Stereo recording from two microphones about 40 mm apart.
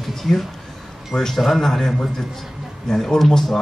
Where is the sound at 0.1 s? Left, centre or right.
Centre.